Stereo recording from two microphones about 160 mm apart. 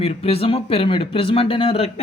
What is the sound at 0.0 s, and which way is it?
Speech, 40° left (ahead or behind).